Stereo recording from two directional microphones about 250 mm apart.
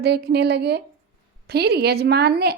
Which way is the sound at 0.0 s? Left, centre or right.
Right.